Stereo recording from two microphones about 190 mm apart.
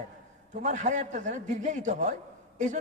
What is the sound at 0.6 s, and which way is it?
A man's voice, 40° right (ahead or behind).